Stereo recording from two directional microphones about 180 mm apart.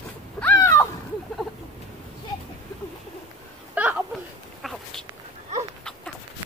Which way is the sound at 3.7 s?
10° right (ahead or behind).